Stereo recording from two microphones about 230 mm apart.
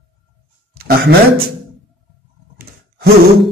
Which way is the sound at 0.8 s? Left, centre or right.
Right.